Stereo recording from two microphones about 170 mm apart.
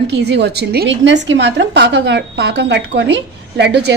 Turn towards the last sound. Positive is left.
turn(degrees=-90)